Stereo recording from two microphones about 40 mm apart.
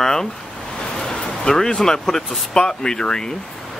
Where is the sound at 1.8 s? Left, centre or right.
Centre.